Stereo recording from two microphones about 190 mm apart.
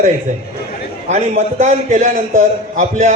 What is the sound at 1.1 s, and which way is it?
A man's voice, 35° right (ahead or behind).